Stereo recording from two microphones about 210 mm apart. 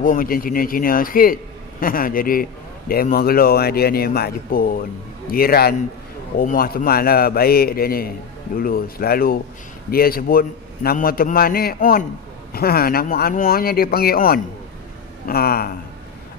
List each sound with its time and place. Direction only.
0.0 s a man's voice: 40° left (ahead or behind)